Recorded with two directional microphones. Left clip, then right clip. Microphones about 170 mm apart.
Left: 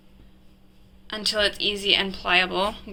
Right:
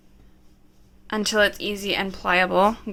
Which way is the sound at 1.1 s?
55° right (ahead or behind).